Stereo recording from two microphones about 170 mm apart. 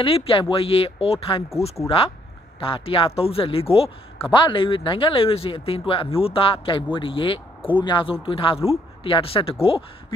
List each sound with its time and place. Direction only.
0.0 s speech: 35° left (ahead or behind)
2.6 s speech: 30° left (ahead or behind)